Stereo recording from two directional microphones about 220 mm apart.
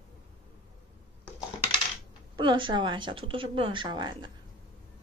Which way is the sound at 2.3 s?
20° right (ahead or behind).